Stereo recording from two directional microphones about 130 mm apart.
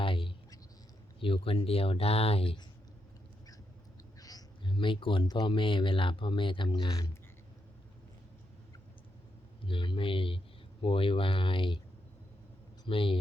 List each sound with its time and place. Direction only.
0.0 s a sound: 40° left (ahead or behind)
1.2 s speech: 45° left (ahead or behind)
4.2 s speech: 30° left (ahead or behind)
6.9 s speech: 25° left (ahead or behind)
9.6 s speech: 40° left (ahead or behind)
12.8 s speech: 45° left (ahead or behind)